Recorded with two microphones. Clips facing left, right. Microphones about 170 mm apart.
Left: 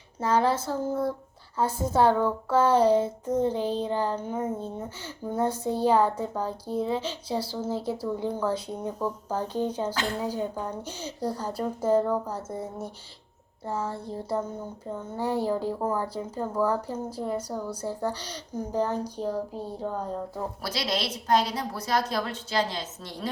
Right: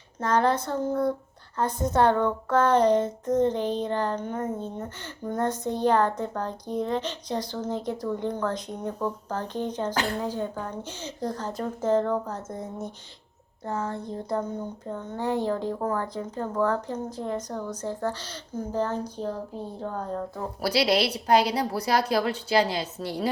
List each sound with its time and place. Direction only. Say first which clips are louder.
0.2 s speech: right 1 dB; 5° left (ahead or behind)
1.5 s a sound: even; 5° left (ahead or behind)
21.0 s a woman's voice: right 3 dB; 30° right (ahead or behind)
23.0 s a woman's voice: right 9 dB; 65° right (ahead or behind)